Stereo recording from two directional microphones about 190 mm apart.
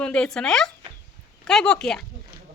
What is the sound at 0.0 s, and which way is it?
Speech, 5° left (ahead or behind).